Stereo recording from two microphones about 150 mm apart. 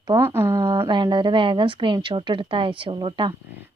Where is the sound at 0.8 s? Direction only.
30° right (ahead or behind).